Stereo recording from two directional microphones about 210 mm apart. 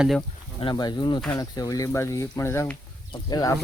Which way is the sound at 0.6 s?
20° left (ahead or behind).